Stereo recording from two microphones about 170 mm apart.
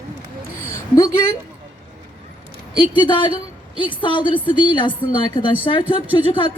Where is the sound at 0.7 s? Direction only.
15° left (ahead or behind).